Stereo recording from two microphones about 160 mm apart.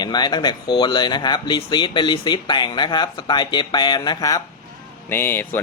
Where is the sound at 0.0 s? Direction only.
25° left (ahead or behind).